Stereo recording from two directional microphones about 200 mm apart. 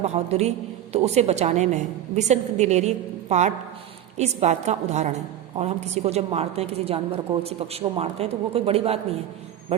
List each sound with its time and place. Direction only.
0.0 s a woman's voice: 35° right (ahead or behind)